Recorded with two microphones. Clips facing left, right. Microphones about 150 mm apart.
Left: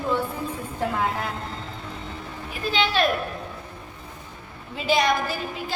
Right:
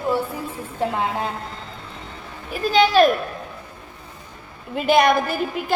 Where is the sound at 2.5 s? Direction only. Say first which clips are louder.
Right 8 dB; 40° right (ahead or behind).